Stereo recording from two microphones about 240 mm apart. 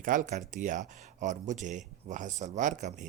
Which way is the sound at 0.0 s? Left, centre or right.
Right.